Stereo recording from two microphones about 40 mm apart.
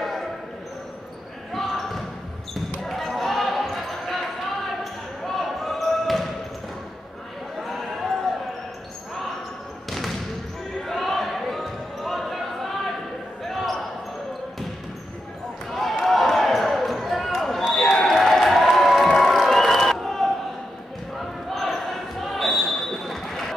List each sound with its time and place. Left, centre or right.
0.0 s basketball bounce: centre
1.5 s basketball bounce: centre
5.4 s basketball bounce: centre
7.6 s basketball bounce: centre
9.8 s basketball bounce: centre
15.7 s basketball bounce: centre
17.4 s a sound: centre
21.5 s basketball bounce: centre